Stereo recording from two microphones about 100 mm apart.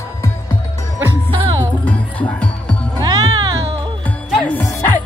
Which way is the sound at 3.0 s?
40° right (ahead or behind).